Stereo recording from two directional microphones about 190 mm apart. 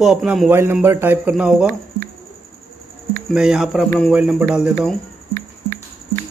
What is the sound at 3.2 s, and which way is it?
Speech, 5° right (ahead or behind).